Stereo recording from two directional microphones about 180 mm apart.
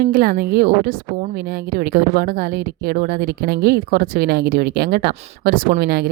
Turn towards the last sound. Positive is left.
turn(degrees=-60)  # may be behind; listen again after turning